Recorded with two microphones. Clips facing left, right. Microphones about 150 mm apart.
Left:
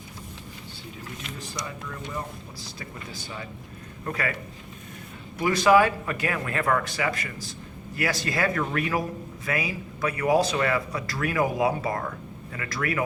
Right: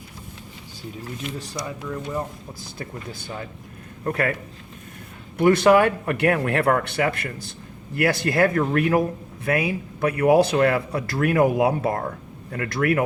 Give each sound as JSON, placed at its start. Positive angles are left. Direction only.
{"t": 2.7, "sound": "speech", "side_deg": -55}
{"t": 5.4, "sound": "a man's voice", "side_deg": -60}